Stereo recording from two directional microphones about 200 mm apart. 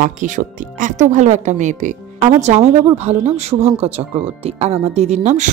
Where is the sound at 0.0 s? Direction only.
40° right (ahead or behind).